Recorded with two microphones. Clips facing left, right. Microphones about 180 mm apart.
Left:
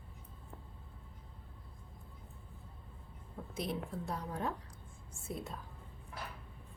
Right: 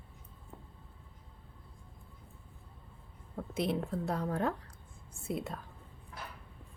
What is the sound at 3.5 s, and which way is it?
A woman's voice, 70° right (ahead or behind).